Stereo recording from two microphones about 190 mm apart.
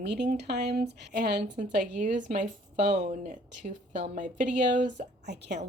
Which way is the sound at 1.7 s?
45° right (ahead or behind).